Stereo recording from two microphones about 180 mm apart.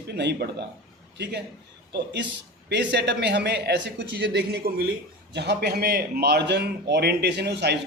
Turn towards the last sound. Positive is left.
turn(degrees=-65)  # may be behind; listen again after turning